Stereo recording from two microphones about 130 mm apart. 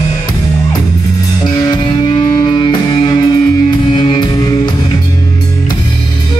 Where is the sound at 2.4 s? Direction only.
35° left (ahead or behind).